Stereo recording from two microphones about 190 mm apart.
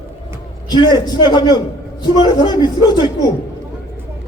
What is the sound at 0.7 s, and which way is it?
A man's voice, 20° left (ahead or behind).